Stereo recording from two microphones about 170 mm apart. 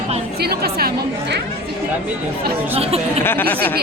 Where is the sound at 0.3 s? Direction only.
65° right (ahead or behind).